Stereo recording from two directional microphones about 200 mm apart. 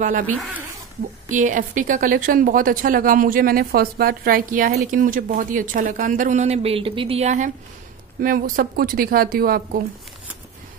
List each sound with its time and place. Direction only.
1.3 s a woman's voice: 40° right (ahead or behind)